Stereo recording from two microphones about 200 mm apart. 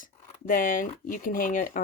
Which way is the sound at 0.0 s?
45° left (ahead or behind).